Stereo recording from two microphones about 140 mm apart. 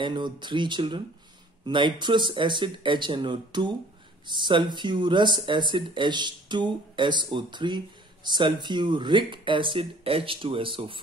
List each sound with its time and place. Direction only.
0.0 s speech: 35° right (ahead or behind)